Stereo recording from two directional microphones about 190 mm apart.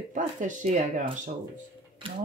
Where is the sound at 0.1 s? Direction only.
40° right (ahead or behind).